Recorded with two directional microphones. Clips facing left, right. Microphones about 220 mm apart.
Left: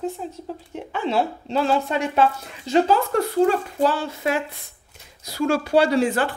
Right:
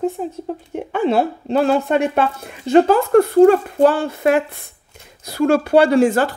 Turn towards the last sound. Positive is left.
turn(degrees=-45)  # may be behind; listen again after turning